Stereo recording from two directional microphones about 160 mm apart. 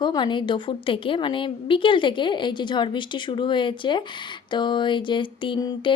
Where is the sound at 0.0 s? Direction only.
30° left (ahead or behind).